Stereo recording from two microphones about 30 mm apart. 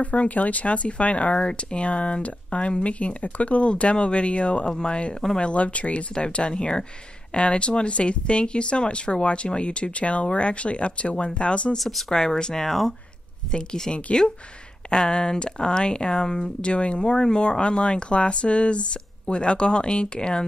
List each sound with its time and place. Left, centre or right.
0.0 s speech: left
1.3 s speech: left
1.9 s speech: left
4.6 s speech: left
5.4 s speech: left
6.1 s speech: left
12.1 s speech: left
12.5 s speech: centre
13.5 s speech: left
14.9 s speech: left
16.7 s speech: left
17.0 s speech: left